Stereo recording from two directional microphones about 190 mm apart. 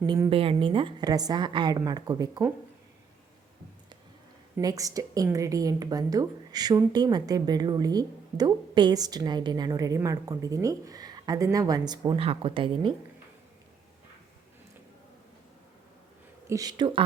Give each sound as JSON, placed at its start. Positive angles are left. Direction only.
{"t": 0.0, "sound": "a woman's voice", "side_deg": -25}
{"t": 4.5, "sound": "a woman's voice", "side_deg": -20}
{"t": 16.5, "sound": "a woman's voice", "side_deg": -20}